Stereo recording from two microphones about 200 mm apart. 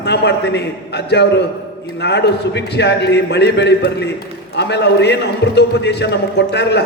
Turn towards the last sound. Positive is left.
turn(degrees=55)  # may be behind; listen again after turning